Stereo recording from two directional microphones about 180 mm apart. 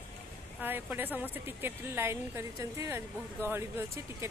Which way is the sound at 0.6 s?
10° right (ahead or behind).